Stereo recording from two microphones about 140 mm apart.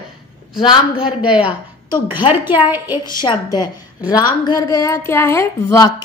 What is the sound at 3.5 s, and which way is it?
A woman's voice, 30° left (ahead or behind).